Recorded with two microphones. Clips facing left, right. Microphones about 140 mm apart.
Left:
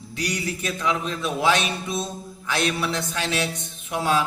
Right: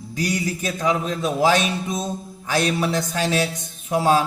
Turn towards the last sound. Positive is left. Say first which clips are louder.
# right 5 dB
turn(degrees=-40)  # may be behind; listen again after turning